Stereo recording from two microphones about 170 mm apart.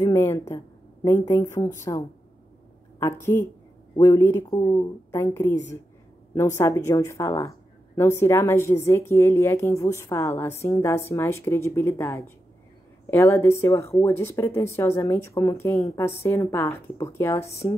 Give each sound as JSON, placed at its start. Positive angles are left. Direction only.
{"t": 0.0, "sound": "speech", "side_deg": 15}
{"t": 4.5, "sound": "speech", "side_deg": 25}
{"t": 5.1, "sound": "speech", "side_deg": 15}